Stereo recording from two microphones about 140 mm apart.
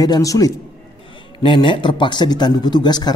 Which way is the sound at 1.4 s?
35° left (ahead or behind).